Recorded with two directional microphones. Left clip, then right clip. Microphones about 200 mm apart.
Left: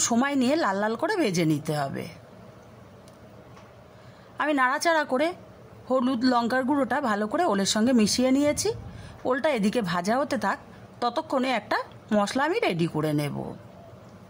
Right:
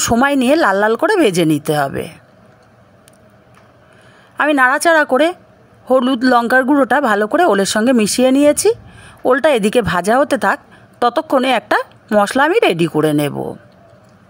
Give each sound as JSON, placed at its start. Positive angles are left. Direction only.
{"t": 0.0, "sound": "speech", "side_deg": -30}
{"t": 4.4, "sound": "speech", "side_deg": -30}